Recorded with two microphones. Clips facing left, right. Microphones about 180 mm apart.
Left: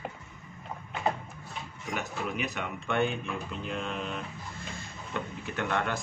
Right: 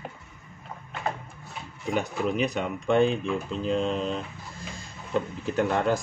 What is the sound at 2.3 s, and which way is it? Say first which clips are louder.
Speech: right 7 dB; 35° right (ahead or behind).